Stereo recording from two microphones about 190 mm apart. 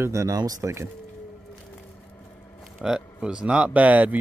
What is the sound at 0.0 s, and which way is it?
Speech, 15° right (ahead or behind).